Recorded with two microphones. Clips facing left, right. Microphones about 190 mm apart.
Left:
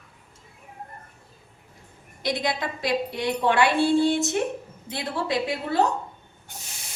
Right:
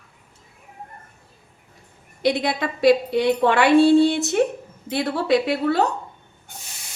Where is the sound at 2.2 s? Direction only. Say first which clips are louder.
Right 5 dB; 65° right (ahead or behind).